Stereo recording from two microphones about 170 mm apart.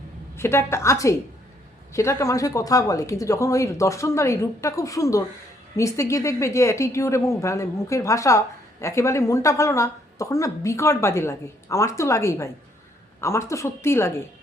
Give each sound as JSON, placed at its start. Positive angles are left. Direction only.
{"t": 0.3, "sound": "a woman's voice", "side_deg": 15}